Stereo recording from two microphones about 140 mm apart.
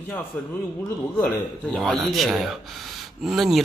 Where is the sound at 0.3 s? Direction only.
10° left (ahead or behind).